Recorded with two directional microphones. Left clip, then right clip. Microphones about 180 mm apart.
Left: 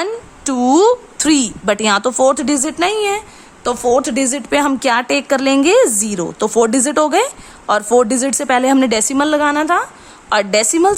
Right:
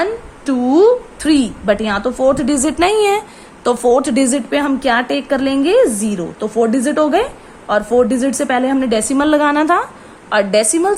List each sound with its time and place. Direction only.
0.0 s a woman's voice: 30° left (ahead or behind)
2.6 s a woman's voice: 10° left (ahead or behind); by 9.2 s 30° left (ahead or behind)
9.2 s speech: 10° left (ahead or behind)
10.2 s a woman's voice: 25° left (ahead or behind)